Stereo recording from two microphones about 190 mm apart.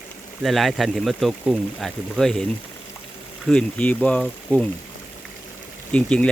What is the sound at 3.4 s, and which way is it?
Speech, 5° left (ahead or behind).